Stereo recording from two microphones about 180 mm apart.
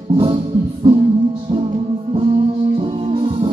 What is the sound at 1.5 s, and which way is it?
Music, 30° right (ahead or behind).